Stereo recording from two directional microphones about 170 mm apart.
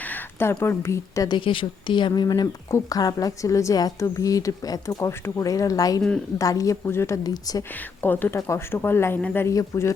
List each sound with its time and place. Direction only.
0.0 s speech: 10° left (ahead or behind)
7.7 s speech: 10° left (ahead or behind)